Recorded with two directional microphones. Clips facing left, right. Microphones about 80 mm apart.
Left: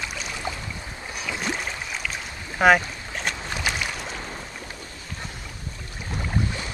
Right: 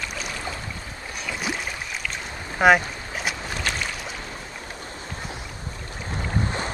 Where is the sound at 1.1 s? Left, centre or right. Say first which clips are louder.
Even; centre.